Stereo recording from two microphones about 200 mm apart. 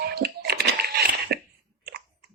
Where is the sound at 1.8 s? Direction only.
50° right (ahead or behind).